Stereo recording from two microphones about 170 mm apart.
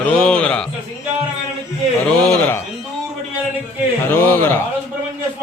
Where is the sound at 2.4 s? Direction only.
15° left (ahead or behind).